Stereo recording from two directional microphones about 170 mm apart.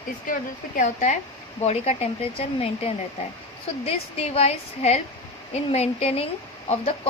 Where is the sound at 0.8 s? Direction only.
45° left (ahead or behind).